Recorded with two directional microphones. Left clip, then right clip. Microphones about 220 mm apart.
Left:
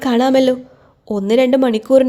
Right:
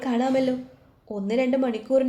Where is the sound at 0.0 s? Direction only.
45° left (ahead or behind).